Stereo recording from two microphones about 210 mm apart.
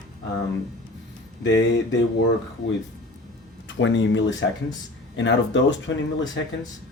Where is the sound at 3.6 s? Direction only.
60° left (ahead or behind).